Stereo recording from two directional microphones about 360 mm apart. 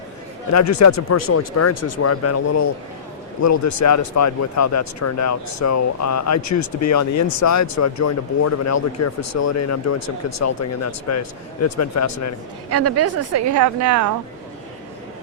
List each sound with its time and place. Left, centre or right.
0.5 s speech: left
1.7 s speech: left
2.0 s speech: left
12.7 s a woman's voice: right